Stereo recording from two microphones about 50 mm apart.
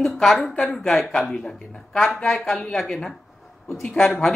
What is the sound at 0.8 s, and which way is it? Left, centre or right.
Speech, centre.